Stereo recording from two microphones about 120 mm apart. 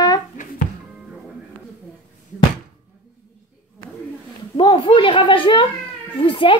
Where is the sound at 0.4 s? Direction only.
90° left.